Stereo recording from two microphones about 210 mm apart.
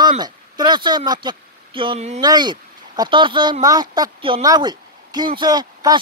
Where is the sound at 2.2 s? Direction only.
20° right (ahead or behind).